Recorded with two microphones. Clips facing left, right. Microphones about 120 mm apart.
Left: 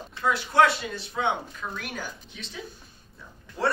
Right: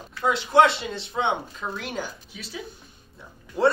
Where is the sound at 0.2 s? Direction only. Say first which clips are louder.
Right 3 dB; 20° right (ahead or behind).